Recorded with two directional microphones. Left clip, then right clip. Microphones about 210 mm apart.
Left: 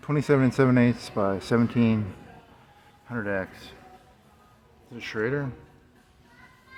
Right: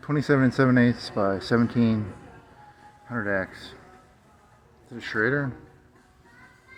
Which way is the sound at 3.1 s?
Centre (ahead or behind).